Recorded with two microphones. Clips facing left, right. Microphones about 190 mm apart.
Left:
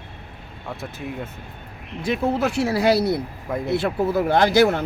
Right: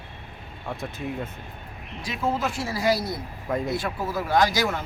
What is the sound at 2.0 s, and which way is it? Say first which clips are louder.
Speech: left 5 dB; 60° left (ahead or behind).